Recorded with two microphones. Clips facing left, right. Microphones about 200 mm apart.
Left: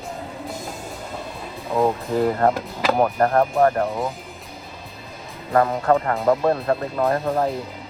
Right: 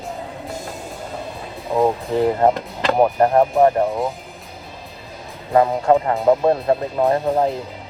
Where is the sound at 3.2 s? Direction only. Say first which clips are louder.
Right 3 dB; 15° right (ahead or behind).